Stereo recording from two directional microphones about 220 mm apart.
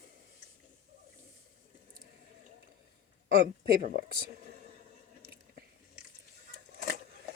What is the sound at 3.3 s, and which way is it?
Speech, 45° right (ahead or behind).